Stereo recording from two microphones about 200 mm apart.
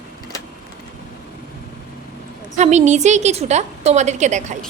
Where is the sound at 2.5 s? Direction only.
35° right (ahead or behind).